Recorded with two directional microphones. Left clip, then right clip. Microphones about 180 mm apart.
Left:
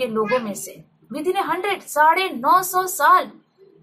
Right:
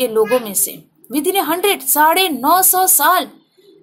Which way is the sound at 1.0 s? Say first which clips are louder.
Right 5 dB; 50° right (ahead or behind).